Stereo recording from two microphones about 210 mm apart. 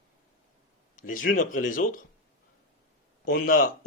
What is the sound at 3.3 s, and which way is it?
Speech, 45° left (ahead or behind).